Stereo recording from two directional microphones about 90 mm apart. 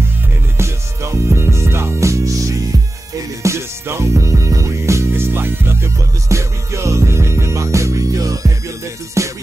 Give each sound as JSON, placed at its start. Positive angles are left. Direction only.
{"t": 0.6, "sound": "music", "side_deg": -30}